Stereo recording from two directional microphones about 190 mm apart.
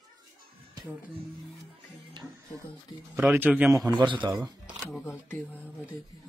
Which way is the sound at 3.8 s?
25° right (ahead or behind).